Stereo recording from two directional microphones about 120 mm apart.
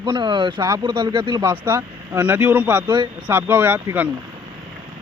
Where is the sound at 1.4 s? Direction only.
20° right (ahead or behind).